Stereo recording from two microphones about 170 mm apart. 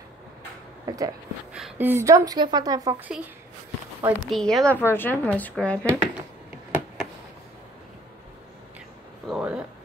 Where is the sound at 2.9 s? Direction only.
10° right (ahead or behind); by 5.8 s 5° left (ahead or behind).